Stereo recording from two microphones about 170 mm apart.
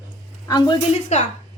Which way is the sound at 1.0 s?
45° left (ahead or behind).